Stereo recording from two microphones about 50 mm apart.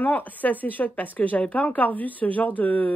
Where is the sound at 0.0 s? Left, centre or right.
Left.